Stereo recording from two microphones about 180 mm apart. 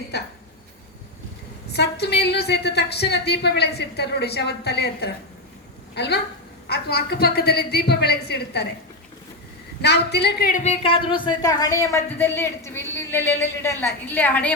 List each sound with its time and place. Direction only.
1.7 s a woman's voice: 65° left (ahead or behind)
9.8 s a woman's voice: 65° left (ahead or behind)
10.5 s speech: 35° left (ahead or behind); by 14.5 s 10° left (ahead or behind)